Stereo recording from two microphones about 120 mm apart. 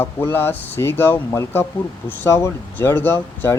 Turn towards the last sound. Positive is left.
turn(degrees=20)  # may be behind; listen again after turning